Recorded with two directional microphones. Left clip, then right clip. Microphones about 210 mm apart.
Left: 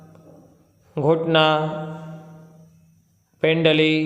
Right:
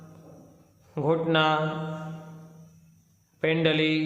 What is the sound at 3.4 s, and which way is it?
Speech, 20° left (ahead or behind).